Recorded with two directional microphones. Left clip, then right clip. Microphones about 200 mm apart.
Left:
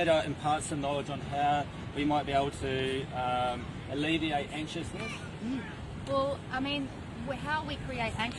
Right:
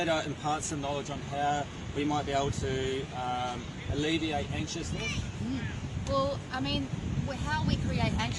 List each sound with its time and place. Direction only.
0.0 s speech: 20° left (ahead or behind)
6.1 s speech: centre (ahead or behind)